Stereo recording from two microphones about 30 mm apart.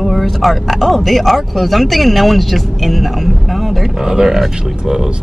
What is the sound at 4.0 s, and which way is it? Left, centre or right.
Speech, centre.